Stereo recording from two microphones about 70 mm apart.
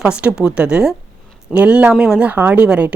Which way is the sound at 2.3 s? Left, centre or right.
Right.